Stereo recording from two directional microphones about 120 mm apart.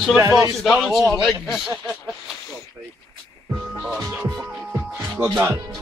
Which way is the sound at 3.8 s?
5° right (ahead or behind).